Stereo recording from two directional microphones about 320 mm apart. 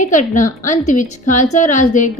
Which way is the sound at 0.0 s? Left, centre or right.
Left.